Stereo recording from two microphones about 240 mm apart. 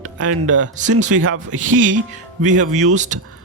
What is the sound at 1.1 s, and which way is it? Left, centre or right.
Speech, right.